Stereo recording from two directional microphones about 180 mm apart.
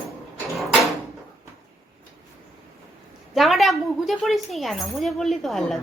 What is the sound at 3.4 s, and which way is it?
Speech, centre (ahead or behind).